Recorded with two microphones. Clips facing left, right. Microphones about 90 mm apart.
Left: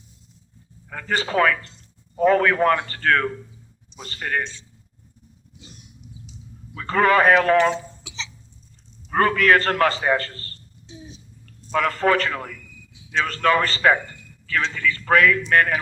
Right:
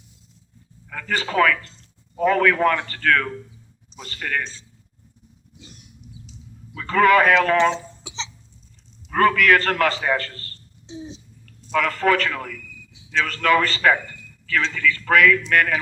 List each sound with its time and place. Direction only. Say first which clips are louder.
0.9 s a man's voice: left 1 dB; 25° left (ahead or behind)
6.7 s a man's voice: right 2 dB; 30° left (ahead or behind)
7.6 s a sound: right 1 dB; 25° right (ahead or behind)
9.0 s a man's voice: right 1 dB; 30° left (ahead or behind)
10.8 s a sound: right 7 dB; 25° right (ahead or behind)
11.4 s a man's voice: even; 30° left (ahead or behind)